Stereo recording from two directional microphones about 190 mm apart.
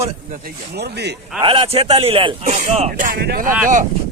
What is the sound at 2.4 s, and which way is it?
Speech, 40° right (ahead or behind).